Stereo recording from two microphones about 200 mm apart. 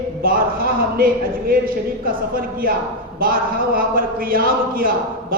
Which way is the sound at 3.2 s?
45° right (ahead or behind).